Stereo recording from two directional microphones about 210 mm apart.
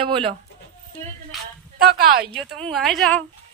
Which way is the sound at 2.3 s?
5° left (ahead or behind).